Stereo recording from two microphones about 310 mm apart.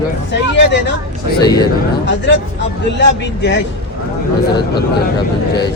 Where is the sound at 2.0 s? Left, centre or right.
Left.